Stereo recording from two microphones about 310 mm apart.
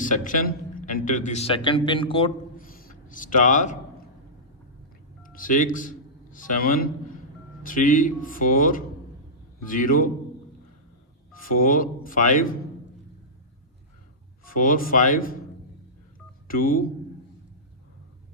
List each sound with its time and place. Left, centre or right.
0.0 s a man's voice: left
5.2 s a man's voice: left
11.4 s speech: left
14.4 s speech: left
16.5 s speech: left